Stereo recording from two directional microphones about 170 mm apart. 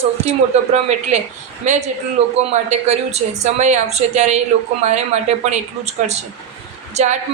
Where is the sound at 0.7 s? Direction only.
40° right (ahead or behind).